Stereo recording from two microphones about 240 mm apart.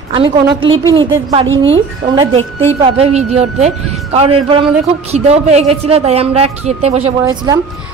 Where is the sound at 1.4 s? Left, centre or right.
Right.